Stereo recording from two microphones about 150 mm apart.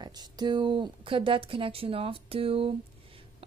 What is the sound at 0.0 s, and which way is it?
A woman's voice, 30° right (ahead or behind).